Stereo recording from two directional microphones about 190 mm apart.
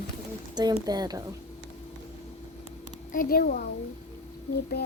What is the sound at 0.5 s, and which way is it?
Speech, 20° right (ahead or behind).